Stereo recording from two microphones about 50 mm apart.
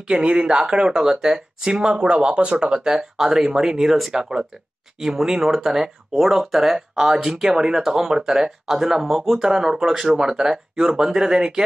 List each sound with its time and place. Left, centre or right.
0.1 s speech: centre